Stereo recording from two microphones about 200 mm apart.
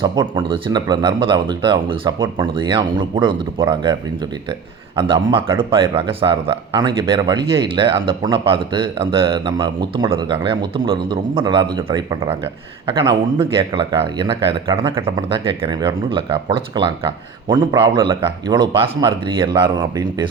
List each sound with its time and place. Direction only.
0.0 s speech: 25° right (ahead or behind)
4.9 s speech: 25° right (ahead or behind)